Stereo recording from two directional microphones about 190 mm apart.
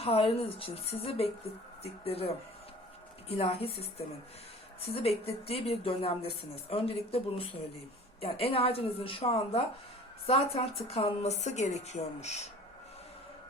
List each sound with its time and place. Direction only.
0.0 s speech: 30° left (ahead or behind)